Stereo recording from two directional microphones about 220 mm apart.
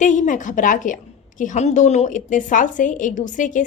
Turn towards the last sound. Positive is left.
turn(degrees=35)  # may be behind; listen again after turning